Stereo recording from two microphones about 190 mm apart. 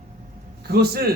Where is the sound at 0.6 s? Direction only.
55° right (ahead or behind).